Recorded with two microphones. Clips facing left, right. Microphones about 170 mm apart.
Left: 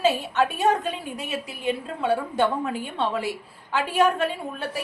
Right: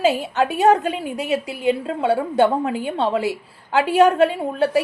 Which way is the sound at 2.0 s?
25° right (ahead or behind).